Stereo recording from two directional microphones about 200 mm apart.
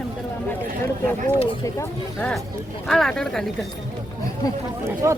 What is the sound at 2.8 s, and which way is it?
Speech, centre (ahead or behind).